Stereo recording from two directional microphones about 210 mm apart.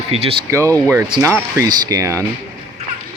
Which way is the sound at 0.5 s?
15° right (ahead or behind).